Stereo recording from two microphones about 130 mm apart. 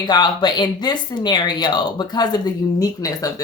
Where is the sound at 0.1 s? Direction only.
35° left (ahead or behind).